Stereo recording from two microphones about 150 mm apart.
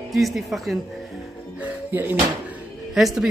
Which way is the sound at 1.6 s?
15° right (ahead or behind).